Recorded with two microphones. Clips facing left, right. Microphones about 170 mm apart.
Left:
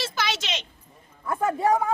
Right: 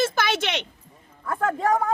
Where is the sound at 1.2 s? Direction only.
15° left (ahead or behind).